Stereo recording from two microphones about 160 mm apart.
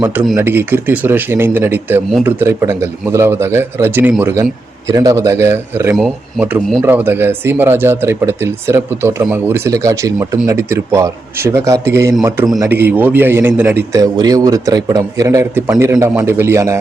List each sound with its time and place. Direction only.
0.0 s speech: 10° right (ahead or behind)
14.0 s a man's voice: 25° right (ahead or behind)